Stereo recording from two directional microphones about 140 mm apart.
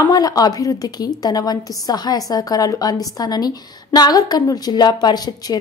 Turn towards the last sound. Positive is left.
turn(degrees=30)  # may be behind; listen again after turning